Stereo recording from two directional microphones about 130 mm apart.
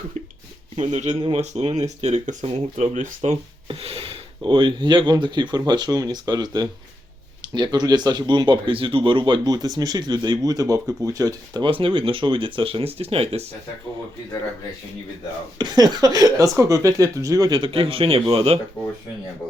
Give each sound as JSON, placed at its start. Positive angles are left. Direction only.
{"t": 0.8, "sound": "speech", "side_deg": -60}
{"t": 3.7, "sound": "speech", "side_deg": -50}
{"t": 11.6, "sound": "speech", "side_deg": -40}
{"t": 15.5, "sound": "speech", "side_deg": -30}